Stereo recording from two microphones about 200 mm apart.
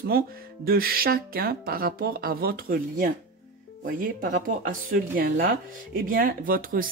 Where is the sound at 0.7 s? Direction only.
50° right (ahead or behind).